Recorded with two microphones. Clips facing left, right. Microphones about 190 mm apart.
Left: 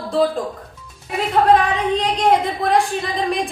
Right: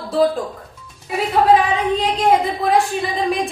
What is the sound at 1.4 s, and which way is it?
A woman's voice, 5° right (ahead or behind).